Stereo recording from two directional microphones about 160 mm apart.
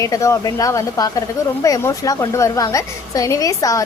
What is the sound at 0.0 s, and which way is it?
Speech, 20° left (ahead or behind).